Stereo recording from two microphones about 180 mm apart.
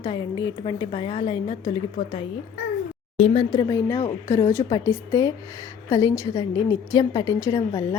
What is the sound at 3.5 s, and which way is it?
A woman's voice, 20° left (ahead or behind).